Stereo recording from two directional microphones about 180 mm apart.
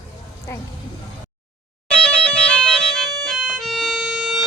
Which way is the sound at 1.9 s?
5° left (ahead or behind).